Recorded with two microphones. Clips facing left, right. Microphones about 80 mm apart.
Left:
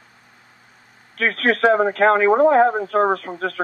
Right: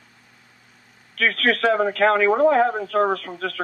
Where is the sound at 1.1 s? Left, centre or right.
Left.